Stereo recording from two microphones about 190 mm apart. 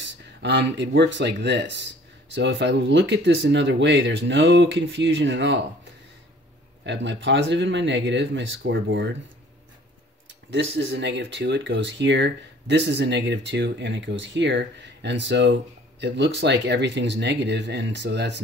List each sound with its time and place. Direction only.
0.4 s speech: 65° right (ahead or behind)
6.9 s speech: 70° right (ahead or behind)
10.2 s speech: 70° right (ahead or behind)